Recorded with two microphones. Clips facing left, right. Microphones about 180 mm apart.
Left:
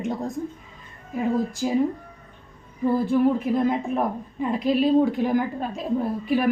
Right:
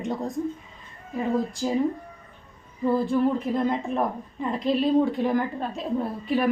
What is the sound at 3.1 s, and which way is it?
A woman's voice, 5° left (ahead or behind).